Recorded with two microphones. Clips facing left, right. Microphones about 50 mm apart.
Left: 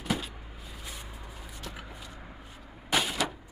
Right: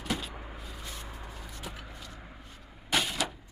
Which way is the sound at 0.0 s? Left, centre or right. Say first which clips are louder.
Left 2 dB; centre.